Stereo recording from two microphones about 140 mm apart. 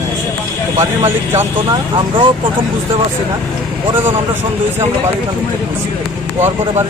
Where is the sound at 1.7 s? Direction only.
35° right (ahead or behind).